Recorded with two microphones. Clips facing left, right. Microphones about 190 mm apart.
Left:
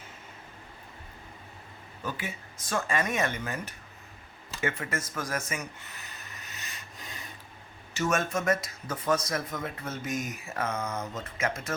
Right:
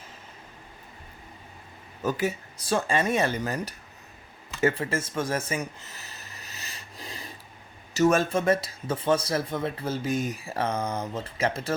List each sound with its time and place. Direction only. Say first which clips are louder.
2.0 s speech: right 9 dB; 40° right (ahead or behind)
6.1 s rub: right 1 dB; 30° right (ahead or behind)
7.9 s speech: right 7 dB; 35° right (ahead or behind)